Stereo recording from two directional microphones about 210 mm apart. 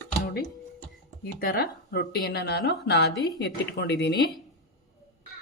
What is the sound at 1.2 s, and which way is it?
Speech, 45° left (ahead or behind).